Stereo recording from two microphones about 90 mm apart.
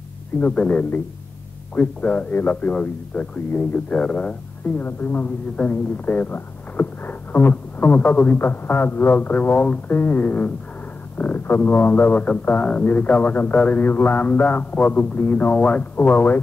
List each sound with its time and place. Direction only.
0.4 s speech: 15° left (ahead or behind)